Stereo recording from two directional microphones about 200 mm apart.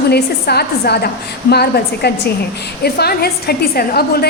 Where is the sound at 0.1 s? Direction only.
55° left (ahead or behind).